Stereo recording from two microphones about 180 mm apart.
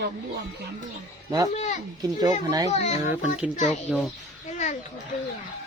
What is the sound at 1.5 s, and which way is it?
Speech, 40° left (ahead or behind).